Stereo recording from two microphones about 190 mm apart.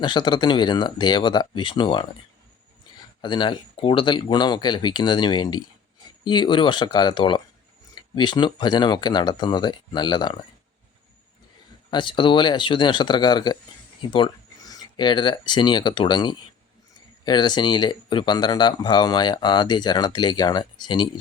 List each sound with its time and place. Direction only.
0.0 s speech: 25° left (ahead or behind)
3.2 s speech: 25° left (ahead or behind)
11.9 s speech: 25° left (ahead or behind)